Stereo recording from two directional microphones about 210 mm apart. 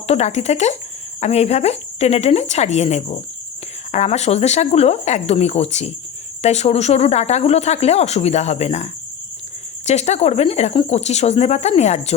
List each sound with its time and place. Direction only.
0.1 s speech: 30° left (ahead or behind)